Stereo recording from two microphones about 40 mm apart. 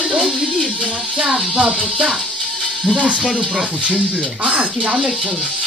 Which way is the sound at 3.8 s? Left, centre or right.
Right.